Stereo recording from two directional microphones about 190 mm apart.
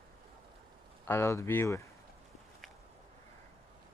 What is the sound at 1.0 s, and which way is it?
Speech, 15° left (ahead or behind).